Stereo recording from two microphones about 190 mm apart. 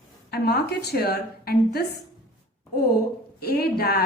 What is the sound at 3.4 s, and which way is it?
Speech, 55° left (ahead or behind).